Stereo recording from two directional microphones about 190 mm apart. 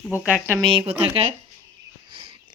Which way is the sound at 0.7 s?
25° right (ahead or behind).